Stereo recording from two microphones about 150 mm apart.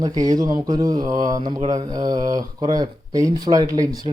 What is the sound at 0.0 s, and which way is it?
Speech, 25° right (ahead or behind).